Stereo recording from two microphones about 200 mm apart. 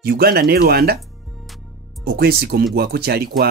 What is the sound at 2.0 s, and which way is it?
Speech, 50° right (ahead or behind).